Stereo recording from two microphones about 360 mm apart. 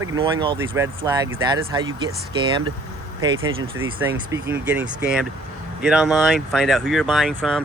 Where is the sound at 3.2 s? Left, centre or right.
Centre.